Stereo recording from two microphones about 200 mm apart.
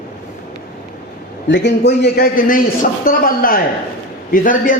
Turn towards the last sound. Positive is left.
turn(degrees=45)  # may be behind; listen again after turning